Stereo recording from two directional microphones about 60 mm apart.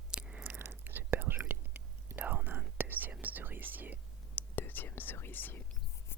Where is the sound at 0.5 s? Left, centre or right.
Right.